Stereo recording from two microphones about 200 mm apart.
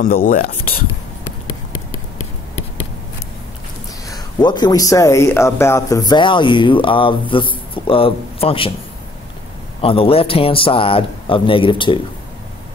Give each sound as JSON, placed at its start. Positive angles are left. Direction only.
{"t": 0.0, "sound": "speech", "side_deg": 45}
{"t": 4.1, "sound": "speech", "side_deg": 20}
{"t": 9.8, "sound": "speech", "side_deg": 30}